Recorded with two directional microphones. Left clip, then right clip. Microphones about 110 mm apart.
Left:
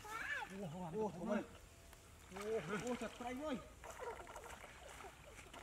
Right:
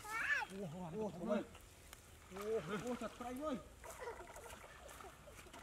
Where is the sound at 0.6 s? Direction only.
15° right (ahead or behind).